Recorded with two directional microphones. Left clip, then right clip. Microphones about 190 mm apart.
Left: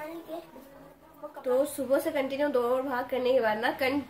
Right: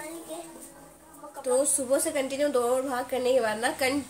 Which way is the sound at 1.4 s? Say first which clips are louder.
Right 1 dB; centre (ahead or behind).